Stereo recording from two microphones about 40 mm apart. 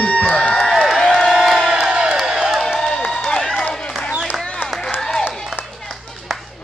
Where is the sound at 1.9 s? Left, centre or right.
Centre.